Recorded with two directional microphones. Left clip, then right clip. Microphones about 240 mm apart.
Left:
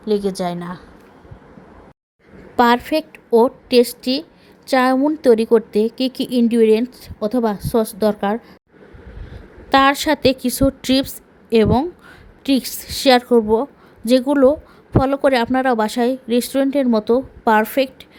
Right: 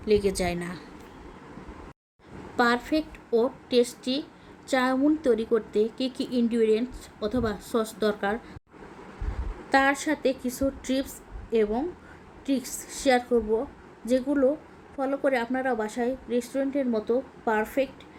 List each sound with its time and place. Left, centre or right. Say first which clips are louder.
0.0 s a woman's voice: left 4 dB; centre
2.6 s a woman's voice: left 9 dB; left
9.6 s a woman's voice: left 9 dB; left